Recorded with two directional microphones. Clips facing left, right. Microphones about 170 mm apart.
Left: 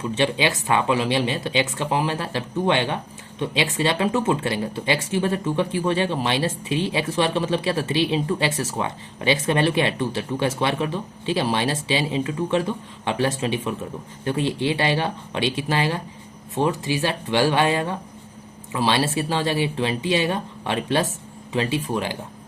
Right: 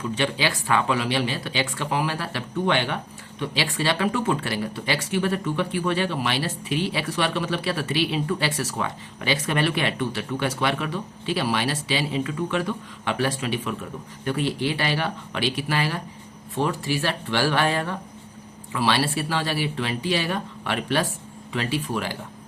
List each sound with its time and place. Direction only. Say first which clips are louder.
0.1 s speech: left 4 dB; 20° left (ahead or behind)